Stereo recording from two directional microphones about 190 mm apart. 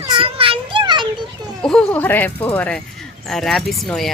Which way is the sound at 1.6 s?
5° left (ahead or behind).